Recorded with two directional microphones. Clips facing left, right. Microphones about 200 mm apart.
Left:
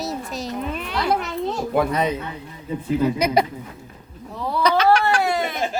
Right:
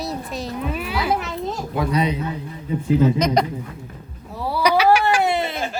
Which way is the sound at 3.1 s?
10° left (ahead or behind).